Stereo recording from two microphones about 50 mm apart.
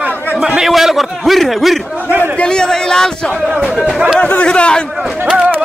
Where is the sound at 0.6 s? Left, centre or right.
Centre.